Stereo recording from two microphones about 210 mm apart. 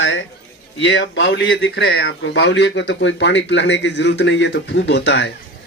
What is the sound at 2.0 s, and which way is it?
A man's voice, 65° left (ahead or behind).